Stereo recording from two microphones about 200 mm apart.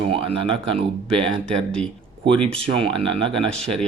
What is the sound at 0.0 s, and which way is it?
Speech, 30° right (ahead or behind).